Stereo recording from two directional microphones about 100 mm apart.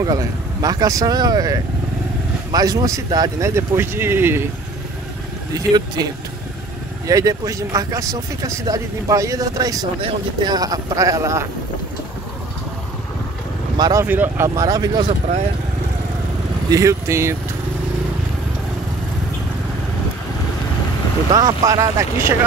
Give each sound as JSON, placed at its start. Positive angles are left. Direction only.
{"t": 0.0, "sound": "speech", "side_deg": -40}
{"t": 3.4, "sound": "speech", "side_deg": -25}
{"t": 5.5, "sound": "speech", "side_deg": -40}
{"t": 7.1, "sound": "speech", "side_deg": -35}
{"t": 14.0, "sound": "speech", "side_deg": -20}
{"t": 14.5, "sound": "speech", "side_deg": -35}
{"t": 16.7, "sound": "speech", "side_deg": -30}
{"t": 21.3, "sound": "speech", "side_deg": -40}